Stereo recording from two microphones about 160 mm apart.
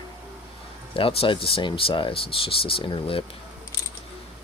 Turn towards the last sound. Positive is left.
turn(degrees=35)  # may be behind; listen again after turning